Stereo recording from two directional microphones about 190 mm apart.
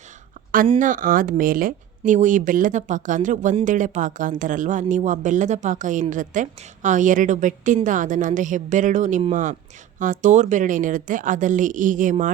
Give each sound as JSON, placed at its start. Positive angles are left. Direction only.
{"t": 0.8, "sound": "speech", "side_deg": -45}